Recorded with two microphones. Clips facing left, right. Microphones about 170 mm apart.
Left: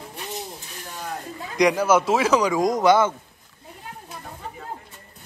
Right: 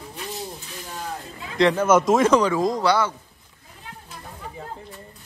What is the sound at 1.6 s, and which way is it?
Speech, 10° left (ahead or behind).